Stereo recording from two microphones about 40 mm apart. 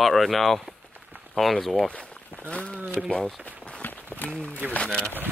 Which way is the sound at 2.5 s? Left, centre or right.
Left.